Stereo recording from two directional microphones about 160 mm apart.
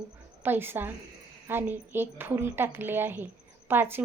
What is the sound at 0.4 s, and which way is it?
A woman's voice, 15° right (ahead or behind).